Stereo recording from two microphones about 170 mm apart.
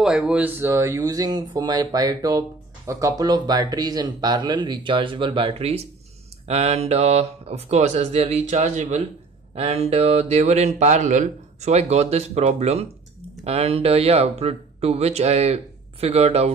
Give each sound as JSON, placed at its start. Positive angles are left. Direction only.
{"t": 0.0, "sound": "speech", "side_deg": -5}